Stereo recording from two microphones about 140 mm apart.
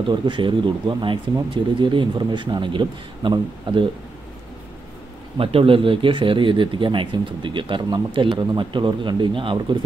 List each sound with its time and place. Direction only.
0.0 s speech: 35° right (ahead or behind)
5.4 s speech: 40° right (ahead or behind)